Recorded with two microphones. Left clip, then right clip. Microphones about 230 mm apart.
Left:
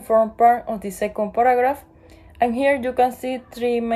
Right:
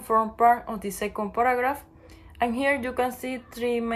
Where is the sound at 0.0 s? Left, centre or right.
Centre.